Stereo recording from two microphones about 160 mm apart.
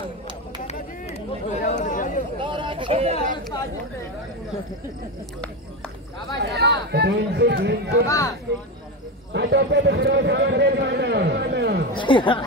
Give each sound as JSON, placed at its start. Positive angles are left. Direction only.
{"t": 0.7, "sound": "chatter", "side_deg": 45}
{"t": 2.3, "sound": "a sound", "side_deg": -30}
{"t": 6.3, "sound": "speech", "side_deg": -90}
{"t": 9.3, "sound": "a man's voice", "side_deg": -90}
{"t": 11.9, "sound": "speech", "side_deg": 30}